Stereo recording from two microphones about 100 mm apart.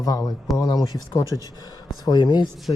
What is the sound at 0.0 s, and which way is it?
Speech, 40° left (ahead or behind).